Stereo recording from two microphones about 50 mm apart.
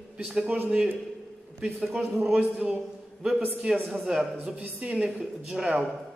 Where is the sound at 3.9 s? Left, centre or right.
Centre.